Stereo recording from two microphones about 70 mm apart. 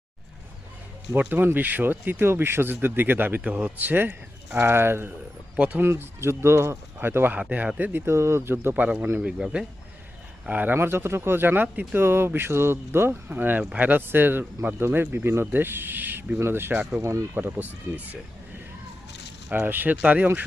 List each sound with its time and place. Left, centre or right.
1.2 s speech: right
3.4 s speech: centre; by 5.1 s right
5.5 s speech: right
5.8 s speech: right
7.8 s speech: right
8.7 s speech: right
10.5 s speech: right
10.8 s speech: right
17.0 s speech: right
17.3 s speech: right
19.5 s speech: right